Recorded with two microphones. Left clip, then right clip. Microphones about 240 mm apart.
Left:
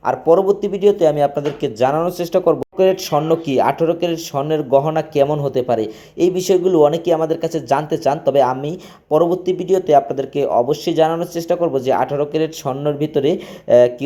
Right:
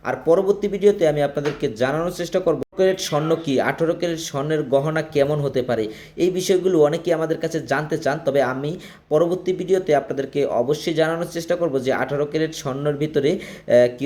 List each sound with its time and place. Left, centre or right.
0.0 s speech: centre